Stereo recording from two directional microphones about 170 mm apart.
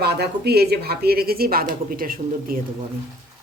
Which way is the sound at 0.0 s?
70° right (ahead or behind).